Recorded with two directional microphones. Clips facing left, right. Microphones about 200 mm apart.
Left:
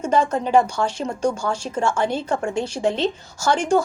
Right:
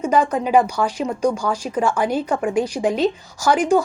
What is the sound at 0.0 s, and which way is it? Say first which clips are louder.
Speech: right 2 dB; 15° right (ahead or behind).